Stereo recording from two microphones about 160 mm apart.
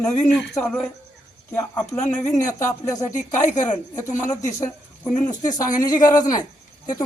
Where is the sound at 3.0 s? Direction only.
50° left (ahead or behind).